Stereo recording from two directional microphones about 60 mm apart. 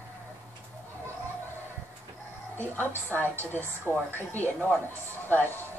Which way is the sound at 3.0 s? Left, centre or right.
Left.